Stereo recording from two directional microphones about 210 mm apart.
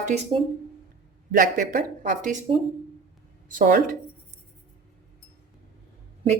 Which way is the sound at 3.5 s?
40° right (ahead or behind).